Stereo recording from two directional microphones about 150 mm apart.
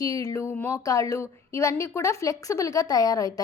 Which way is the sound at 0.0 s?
25° left (ahead or behind).